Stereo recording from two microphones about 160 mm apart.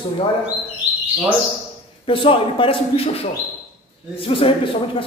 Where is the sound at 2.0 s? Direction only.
35° left (ahead or behind).